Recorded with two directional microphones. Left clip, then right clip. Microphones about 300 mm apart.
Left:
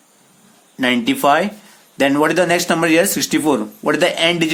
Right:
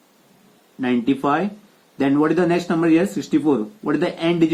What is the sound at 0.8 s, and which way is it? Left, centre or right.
Speech, left.